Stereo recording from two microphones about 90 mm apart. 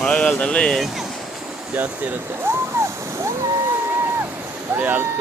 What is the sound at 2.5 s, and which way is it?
Waves, 30° right (ahead or behind).